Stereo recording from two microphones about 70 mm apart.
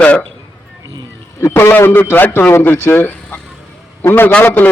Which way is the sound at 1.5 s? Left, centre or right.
Left.